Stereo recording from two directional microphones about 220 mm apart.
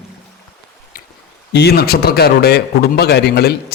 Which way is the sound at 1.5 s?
45° left (ahead or behind).